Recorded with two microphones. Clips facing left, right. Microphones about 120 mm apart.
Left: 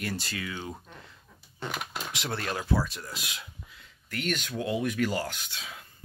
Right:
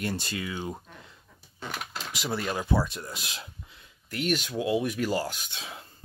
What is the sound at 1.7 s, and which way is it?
Speech, centre (ahead or behind).